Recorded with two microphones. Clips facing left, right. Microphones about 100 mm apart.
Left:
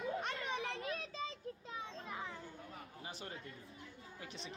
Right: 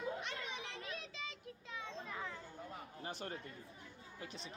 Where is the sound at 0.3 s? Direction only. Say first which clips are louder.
Left 5 dB; 35° left (ahead or behind).